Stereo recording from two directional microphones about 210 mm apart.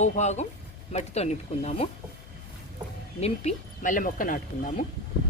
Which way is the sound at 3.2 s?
30° left (ahead or behind).